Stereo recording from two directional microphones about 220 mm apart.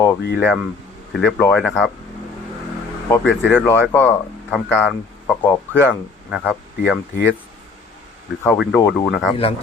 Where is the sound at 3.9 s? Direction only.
10° left (ahead or behind).